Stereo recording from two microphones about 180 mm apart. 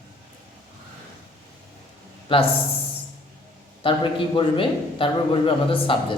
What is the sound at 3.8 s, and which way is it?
A man's voice, 30° left (ahead or behind).